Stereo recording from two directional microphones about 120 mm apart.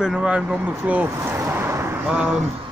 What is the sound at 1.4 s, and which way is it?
Vehicle, 20° right (ahead or behind).